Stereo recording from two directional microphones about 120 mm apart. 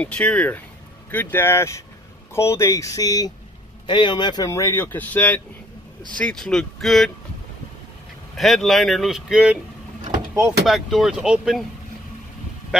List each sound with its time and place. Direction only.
0.0 s speech: 10° left (ahead or behind); by 4.5 s 40° left (ahead or behind)
4.5 s speech: 25° left (ahead or behind); by 7.1 s centre (ahead or behind)
8.4 s speech: centre (ahead or behind)
10.6 s speech: centre (ahead or behind)